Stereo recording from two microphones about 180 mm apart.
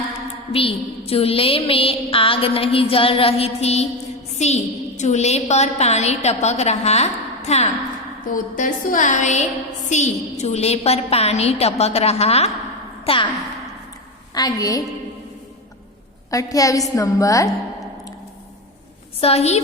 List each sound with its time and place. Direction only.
0.5 s a woman's voice: 30° left (ahead or behind)
8.3 s a woman's voice: 50° left (ahead or behind); by 13.2 s 30° left (ahead or behind)
14.3 s a woman's voice: 20° left (ahead or behind)
16.3 s a woman's voice: 20° left (ahead or behind)
19.2 s a woman's voice: 35° left (ahead or behind)